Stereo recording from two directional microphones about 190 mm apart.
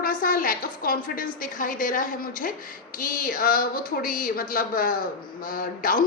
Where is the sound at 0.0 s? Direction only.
50° left (ahead or behind).